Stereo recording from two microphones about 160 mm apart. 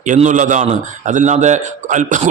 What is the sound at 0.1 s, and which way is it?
A man's voice, 50° right (ahead or behind).